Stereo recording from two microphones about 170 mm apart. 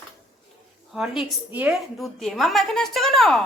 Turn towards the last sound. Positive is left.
turn(degrees=0)  # may be behind; listen again after turning